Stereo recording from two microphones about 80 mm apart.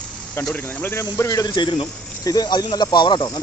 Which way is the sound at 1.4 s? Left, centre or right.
Left.